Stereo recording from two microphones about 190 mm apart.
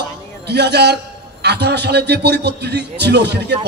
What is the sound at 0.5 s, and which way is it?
A man's voice, 60° right (ahead or behind).